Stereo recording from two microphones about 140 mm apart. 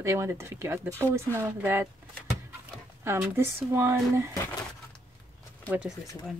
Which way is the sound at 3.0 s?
15° right (ahead or behind).